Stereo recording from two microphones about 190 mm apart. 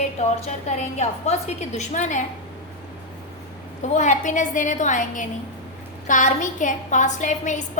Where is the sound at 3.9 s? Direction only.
40° left (ahead or behind).